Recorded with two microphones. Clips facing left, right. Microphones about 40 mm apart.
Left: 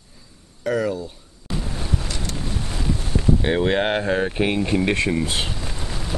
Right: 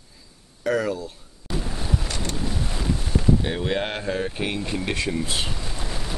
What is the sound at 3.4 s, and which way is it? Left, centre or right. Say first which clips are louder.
Speech: left 6 dB; left.